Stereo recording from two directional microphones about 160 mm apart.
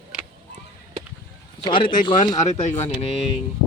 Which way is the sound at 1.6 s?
30° left (ahead or behind).